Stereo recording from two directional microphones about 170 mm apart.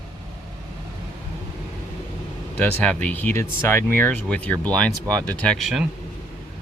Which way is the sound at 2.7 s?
5° left (ahead or behind).